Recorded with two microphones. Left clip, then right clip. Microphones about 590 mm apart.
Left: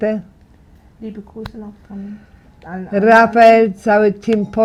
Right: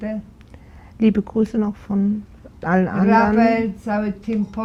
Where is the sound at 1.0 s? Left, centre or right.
Right.